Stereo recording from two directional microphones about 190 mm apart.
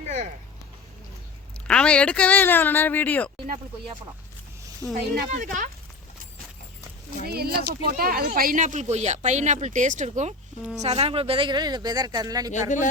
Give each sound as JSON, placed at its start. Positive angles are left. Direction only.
{"t": 1.6, "sound": "a woman's voice", "side_deg": 5}
{"t": 3.3, "sound": "speech", "side_deg": -35}
{"t": 4.8, "sound": "a woman's voice", "side_deg": 15}
{"t": 5.3, "sound": "speech", "side_deg": -40}
{"t": 7.3, "sound": "speech", "side_deg": -55}
{"t": 12.5, "sound": "speech", "side_deg": 40}